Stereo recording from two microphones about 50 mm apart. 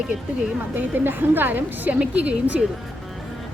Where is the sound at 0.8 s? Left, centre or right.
Right.